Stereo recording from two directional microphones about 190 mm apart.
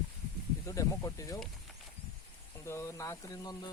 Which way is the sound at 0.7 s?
15° left (ahead or behind).